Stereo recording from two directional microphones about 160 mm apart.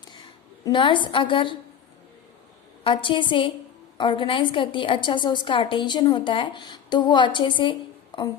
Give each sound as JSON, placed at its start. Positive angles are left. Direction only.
{"t": 0.6, "sound": "a woman's voice", "side_deg": 30}
{"t": 2.8, "sound": "a woman's voice", "side_deg": 30}